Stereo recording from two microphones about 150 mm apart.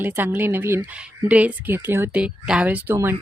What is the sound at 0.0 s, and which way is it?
Speech, 15° right (ahead or behind).